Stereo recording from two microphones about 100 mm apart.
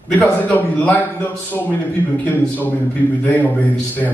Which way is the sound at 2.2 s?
15° left (ahead or behind).